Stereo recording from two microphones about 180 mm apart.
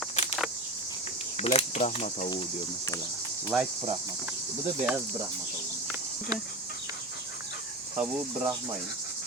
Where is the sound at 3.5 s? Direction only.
10° right (ahead or behind).